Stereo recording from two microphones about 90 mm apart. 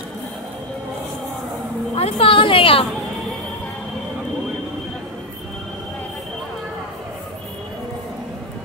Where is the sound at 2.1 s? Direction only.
75° left (ahead or behind).